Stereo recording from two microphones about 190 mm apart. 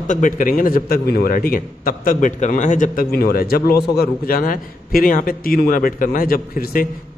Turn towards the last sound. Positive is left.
turn(degrees=50)  # may be behind; listen again after turning